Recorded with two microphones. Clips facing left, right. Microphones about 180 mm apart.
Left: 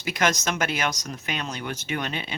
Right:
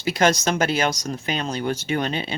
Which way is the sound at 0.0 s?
30° right (ahead or behind).